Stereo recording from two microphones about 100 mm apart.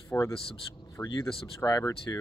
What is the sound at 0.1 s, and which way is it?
Speech, 20° left (ahead or behind).